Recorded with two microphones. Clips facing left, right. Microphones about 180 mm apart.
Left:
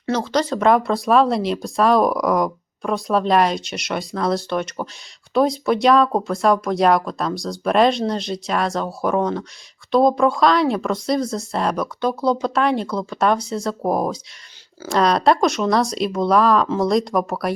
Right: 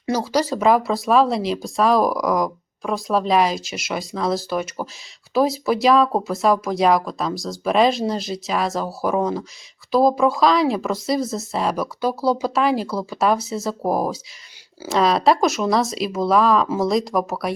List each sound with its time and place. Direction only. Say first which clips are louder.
0.0 s speech: even; 10° right (ahead or behind)